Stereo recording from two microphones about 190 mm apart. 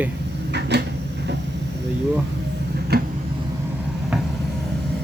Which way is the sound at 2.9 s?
55° right (ahead or behind).